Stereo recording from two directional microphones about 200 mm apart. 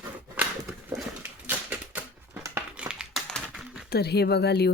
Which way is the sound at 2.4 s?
10° right (ahead or behind).